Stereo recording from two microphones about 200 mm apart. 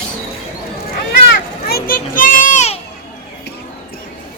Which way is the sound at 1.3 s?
50° left (ahead or behind).